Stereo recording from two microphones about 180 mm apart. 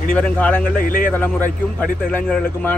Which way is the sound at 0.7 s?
50° left (ahead or behind).